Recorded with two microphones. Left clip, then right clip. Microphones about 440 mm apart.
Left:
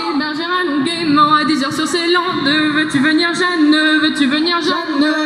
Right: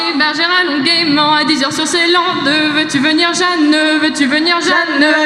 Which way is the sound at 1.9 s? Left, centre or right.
Centre.